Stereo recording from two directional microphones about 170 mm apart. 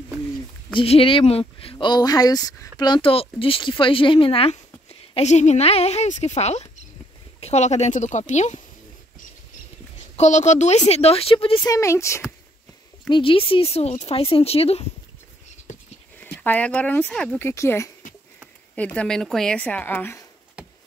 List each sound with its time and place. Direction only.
0.7 s speech: 35° left (ahead or behind)
10.1 s speech: 45° left (ahead or behind)
11.6 s speech: 20° left (ahead or behind)
13.1 s speech: 30° left (ahead or behind)
16.3 s speech: 10° left (ahead or behind)